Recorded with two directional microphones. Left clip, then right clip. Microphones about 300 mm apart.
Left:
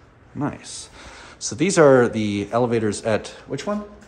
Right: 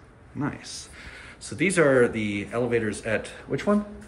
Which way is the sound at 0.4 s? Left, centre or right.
Centre.